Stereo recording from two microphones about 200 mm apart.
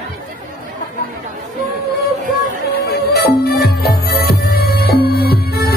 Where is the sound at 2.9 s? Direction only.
50° left (ahead or behind).